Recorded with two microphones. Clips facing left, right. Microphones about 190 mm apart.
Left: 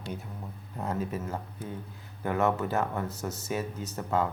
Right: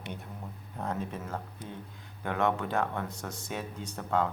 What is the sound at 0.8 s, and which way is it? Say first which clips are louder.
Speech: left 3 dB; 5° left (ahead or behind).